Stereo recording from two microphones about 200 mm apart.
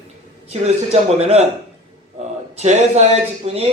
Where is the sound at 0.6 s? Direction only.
30° right (ahead or behind).